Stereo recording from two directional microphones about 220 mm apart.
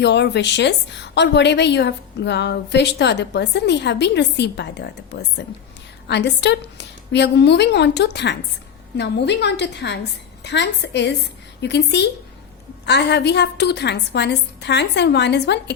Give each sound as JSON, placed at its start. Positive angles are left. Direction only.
{"t": 0.0, "sound": "a woman's voice", "side_deg": 50}